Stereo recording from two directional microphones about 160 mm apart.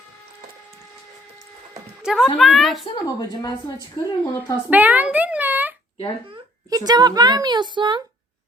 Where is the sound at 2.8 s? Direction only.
25° left (ahead or behind).